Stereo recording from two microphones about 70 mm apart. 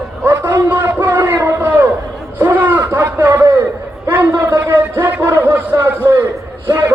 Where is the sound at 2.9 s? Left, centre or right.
Right.